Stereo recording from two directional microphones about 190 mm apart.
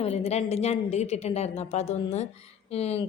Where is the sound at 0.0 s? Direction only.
30° left (ahead or behind).